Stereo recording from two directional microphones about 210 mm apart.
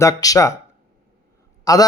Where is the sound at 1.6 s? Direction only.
15° left (ahead or behind).